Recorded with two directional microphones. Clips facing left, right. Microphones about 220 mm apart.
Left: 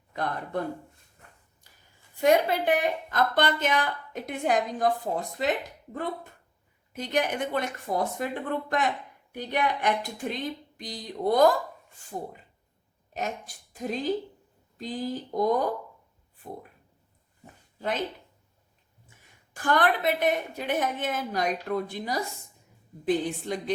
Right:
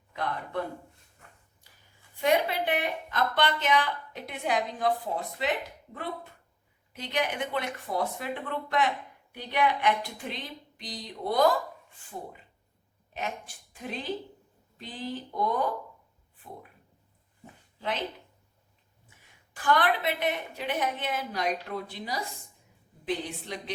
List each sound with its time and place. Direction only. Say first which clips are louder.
0.1 s speech: left 3 dB; 45° left (ahead or behind)
2.2 s a woman's voice: left 4 dB; 45° left (ahead or behind)
6.9 s a woman's voice: left 4 dB; 45° left (ahead or behind)
17.7 s speech: left 3 dB; 45° left (ahead or behind)
19.5 s a woman's voice: left 1 dB; 45° left (ahead or behind)